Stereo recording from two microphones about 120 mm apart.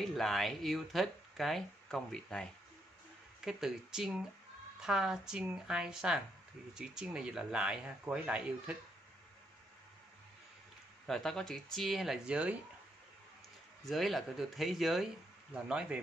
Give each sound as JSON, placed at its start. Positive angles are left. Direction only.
{"t": 0.0, "sound": "speech", "side_deg": 0}
{"t": 11.1, "sound": "speech", "side_deg": 5}
{"t": 13.8, "sound": "speech", "side_deg": 0}